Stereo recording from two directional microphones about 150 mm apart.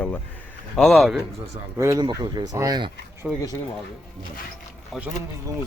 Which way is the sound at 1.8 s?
20° right (ahead or behind).